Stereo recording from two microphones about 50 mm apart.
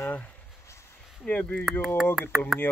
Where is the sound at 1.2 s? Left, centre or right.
Left.